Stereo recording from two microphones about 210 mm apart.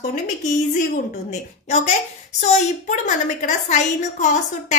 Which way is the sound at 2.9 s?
35° left (ahead or behind).